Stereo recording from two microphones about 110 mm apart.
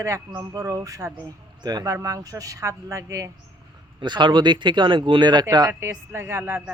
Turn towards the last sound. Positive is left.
turn(degrees=-25)  # may be behind; listen again after turning